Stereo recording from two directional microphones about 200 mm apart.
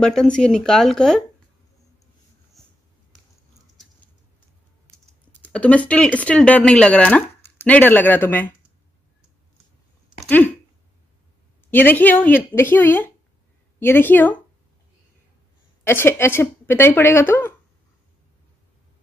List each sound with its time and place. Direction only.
0.0 s speech: 5° left (ahead or behind)
2.6 s a sound: centre (ahead or behind)
4.9 s speech: 5° left (ahead or behind)
10.2 s speech: 10° left (ahead or behind)
11.7 s speech: 10° left (ahead or behind)
15.8 s speech: 10° left (ahead or behind)